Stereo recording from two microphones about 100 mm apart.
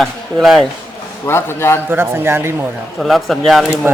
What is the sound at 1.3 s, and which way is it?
Speech, 25° left (ahead or behind).